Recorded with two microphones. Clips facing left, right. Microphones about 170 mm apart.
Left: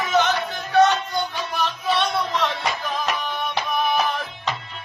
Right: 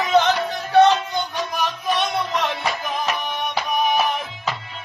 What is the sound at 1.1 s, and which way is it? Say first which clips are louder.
Music: right 1 dB; 15° right (ahead or behind).